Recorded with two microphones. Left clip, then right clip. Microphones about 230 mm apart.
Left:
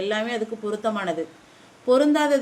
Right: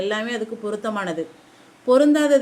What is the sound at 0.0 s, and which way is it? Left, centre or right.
A woman's voice, centre.